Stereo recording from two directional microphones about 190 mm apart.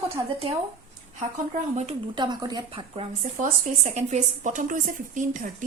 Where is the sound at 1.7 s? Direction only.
35° right (ahead or behind).